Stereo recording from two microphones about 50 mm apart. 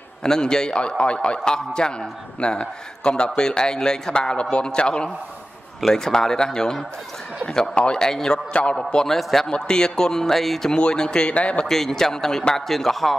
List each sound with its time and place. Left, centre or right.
0.2 s a man's voice: centre
11.6 s a man's voice: centre